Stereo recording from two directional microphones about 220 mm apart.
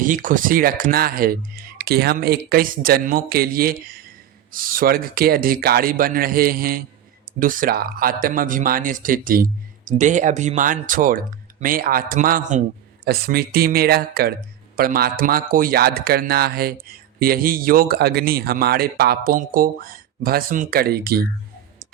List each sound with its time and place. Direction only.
0.0 s a man's voice: 35° right (ahead or behind)